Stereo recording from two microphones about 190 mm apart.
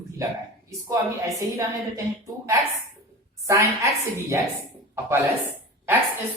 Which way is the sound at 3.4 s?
15° right (ahead or behind).